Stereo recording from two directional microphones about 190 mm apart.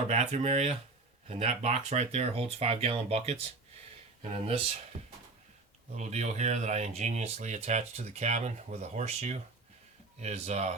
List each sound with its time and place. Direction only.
0.1 s speech: 35° right (ahead or behind)
6.0 s speech: 35° right (ahead or behind)